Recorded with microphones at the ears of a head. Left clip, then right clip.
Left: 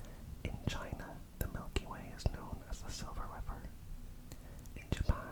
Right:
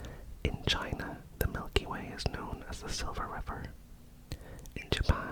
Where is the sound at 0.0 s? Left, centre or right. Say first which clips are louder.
Right 10 dB; right.